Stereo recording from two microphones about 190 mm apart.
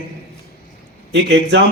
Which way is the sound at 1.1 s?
65° right (ahead or behind).